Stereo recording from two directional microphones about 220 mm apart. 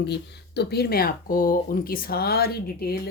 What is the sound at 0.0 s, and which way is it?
Speech, 50° left (ahead or behind).